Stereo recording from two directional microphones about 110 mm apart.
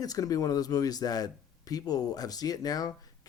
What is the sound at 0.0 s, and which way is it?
Speech, 35° left (ahead or behind).